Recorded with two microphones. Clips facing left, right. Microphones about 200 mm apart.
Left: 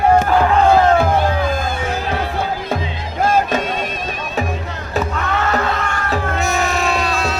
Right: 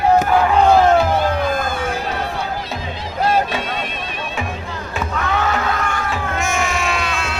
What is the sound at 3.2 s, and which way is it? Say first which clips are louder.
Music: left 2 dB; 45° left (ahead or behind).